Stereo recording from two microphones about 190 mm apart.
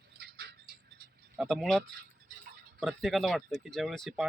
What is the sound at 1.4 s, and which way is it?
Speech, centre (ahead or behind).